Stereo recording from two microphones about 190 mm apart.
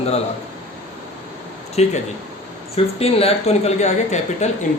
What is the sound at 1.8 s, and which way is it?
Speech, 35° left (ahead or behind).